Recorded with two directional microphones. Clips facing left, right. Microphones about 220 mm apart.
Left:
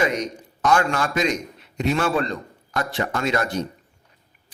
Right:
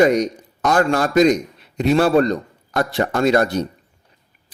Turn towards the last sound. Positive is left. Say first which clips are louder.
# right 7 dB
turn(degrees=-40)  # may be behind; listen again after turning